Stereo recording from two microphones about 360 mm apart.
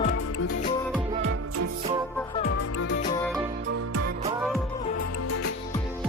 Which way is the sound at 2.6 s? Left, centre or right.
Left.